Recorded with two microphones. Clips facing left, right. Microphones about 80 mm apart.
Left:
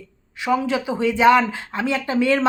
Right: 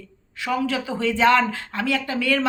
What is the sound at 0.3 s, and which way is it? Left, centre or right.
Speech, left.